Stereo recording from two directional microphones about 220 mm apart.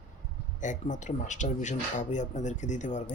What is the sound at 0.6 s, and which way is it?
Speech, 35° left (ahead or behind).